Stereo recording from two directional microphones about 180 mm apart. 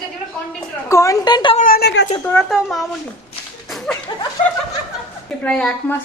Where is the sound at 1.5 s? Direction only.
50° left (ahead or behind).